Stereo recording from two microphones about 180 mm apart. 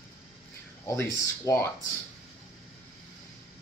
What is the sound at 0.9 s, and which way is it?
Speech, 15° left (ahead or behind).